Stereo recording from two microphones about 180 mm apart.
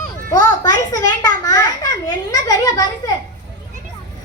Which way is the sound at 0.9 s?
20° left (ahead or behind).